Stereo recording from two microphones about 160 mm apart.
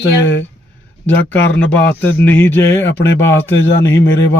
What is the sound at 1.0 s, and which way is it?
Speech, 10° left (ahead or behind).